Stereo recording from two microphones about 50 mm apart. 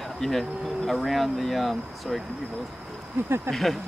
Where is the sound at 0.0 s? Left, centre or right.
Centre.